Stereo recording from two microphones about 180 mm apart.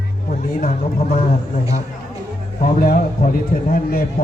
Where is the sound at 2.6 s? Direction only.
50° left (ahead or behind).